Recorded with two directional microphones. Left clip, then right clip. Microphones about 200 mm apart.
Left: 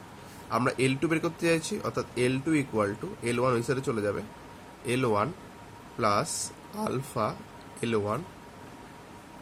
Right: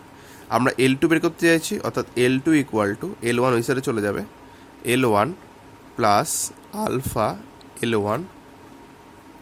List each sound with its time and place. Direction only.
0.5 s speech: 50° right (ahead or behind)